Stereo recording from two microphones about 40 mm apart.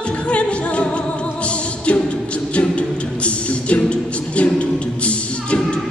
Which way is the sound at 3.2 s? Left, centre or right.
Left.